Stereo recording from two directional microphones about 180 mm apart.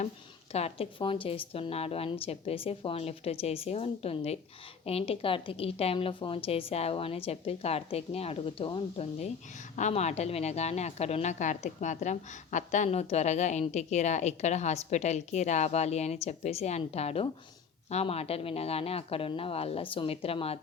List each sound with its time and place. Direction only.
0.5 s a woman's voice: 35° left (ahead or behind)